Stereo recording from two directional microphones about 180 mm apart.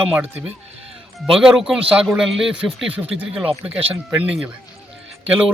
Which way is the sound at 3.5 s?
30° right (ahead or behind).